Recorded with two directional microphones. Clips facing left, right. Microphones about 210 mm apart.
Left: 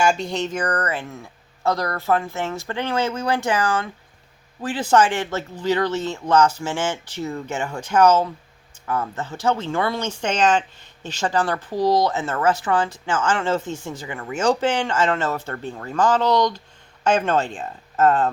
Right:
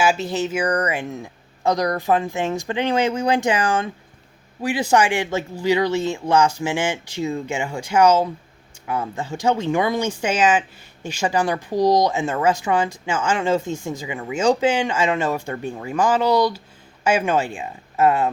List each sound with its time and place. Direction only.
0.0 s speech: 5° right (ahead or behind)